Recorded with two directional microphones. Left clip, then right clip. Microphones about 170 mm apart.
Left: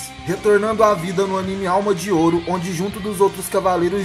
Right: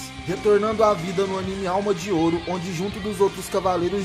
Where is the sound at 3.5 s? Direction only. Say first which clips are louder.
Left 4 dB; 25° right (ahead or behind).